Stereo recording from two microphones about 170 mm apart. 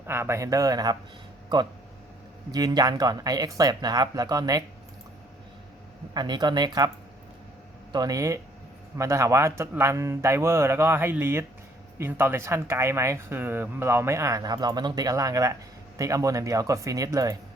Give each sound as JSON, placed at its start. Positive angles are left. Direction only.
{"t": 0.1, "sound": "speech", "side_deg": -15}
{"t": 6.1, "sound": "speech", "side_deg": -25}
{"t": 7.9, "sound": "speech", "side_deg": -20}